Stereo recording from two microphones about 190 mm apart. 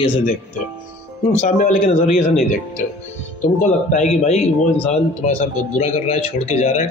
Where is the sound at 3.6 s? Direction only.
40° left (ahead or behind).